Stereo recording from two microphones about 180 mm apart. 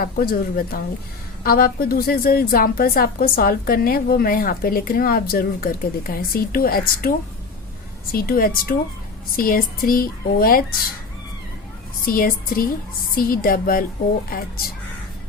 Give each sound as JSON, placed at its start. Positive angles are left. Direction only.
{"t": 0.0, "sound": "a woman's voice", "side_deg": 55}
{"t": 12.0, "sound": "a woman's voice", "side_deg": 55}